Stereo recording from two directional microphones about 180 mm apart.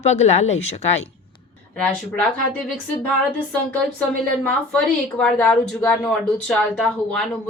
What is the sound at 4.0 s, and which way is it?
A woman's voice, 5° left (ahead or behind).